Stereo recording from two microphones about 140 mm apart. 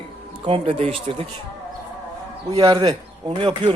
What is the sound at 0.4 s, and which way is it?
Speech, 40° right (ahead or behind).